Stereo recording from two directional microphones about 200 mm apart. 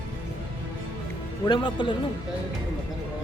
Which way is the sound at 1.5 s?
25° left (ahead or behind).